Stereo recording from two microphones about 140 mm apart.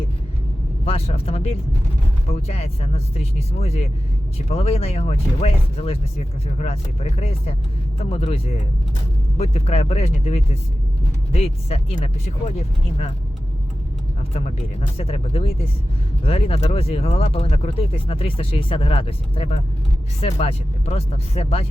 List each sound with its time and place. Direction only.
0.9 s speech: 45° left (ahead or behind)
14.3 s speech: 45° left (ahead or behind)